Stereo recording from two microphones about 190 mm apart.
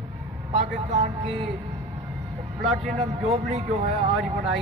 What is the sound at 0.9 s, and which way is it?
Speech, 35° right (ahead or behind).